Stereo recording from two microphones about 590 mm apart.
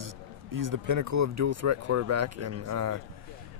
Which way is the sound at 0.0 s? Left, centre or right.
Right.